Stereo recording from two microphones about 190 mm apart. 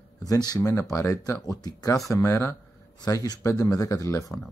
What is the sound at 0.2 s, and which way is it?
Speech, 20° left (ahead or behind).